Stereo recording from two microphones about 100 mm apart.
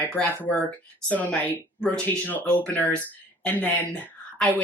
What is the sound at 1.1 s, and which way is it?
A woman's voice, 15° left (ahead or behind).